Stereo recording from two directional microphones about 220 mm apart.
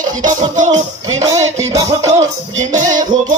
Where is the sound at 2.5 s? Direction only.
35° right (ahead or behind).